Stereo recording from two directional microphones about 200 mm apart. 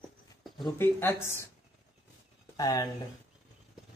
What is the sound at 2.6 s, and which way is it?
Speech, 20° left (ahead or behind).